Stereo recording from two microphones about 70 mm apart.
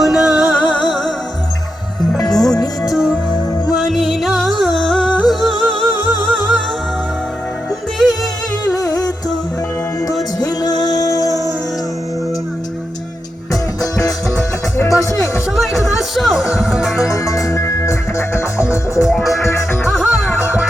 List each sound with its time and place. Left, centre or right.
0.0 s music: centre
2.3 s music: centre
6.1 s music: right
8.7 s music: left
10.4 s music: left
14.8 s music: left
15.5 s music: centre
17.1 s music: left
19.1 s music: centre